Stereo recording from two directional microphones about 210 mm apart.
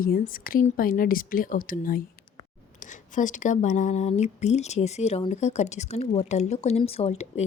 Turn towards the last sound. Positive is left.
turn(degrees=30)  # may be behind; listen again after turning